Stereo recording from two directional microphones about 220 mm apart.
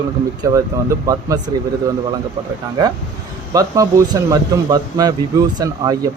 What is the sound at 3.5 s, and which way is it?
Speech, 15° right (ahead or behind).